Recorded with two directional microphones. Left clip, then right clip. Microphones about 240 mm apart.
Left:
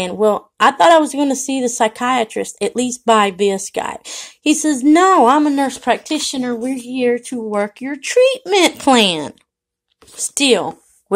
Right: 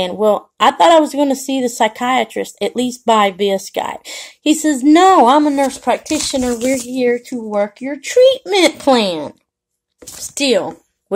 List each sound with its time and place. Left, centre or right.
0.0 s speech: centre
10.3 s a woman's voice: left